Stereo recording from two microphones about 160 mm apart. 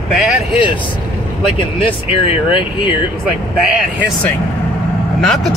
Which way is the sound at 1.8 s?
35° left (ahead or behind).